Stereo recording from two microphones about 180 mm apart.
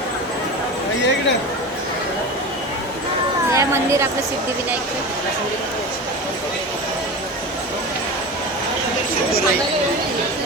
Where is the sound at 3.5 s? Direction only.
15° right (ahead or behind).